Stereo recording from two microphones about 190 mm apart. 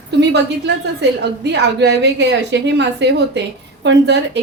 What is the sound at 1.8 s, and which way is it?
Speech, 65° right (ahead or behind).